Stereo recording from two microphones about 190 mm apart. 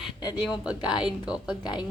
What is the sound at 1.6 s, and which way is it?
Speech, 20° left (ahead or behind).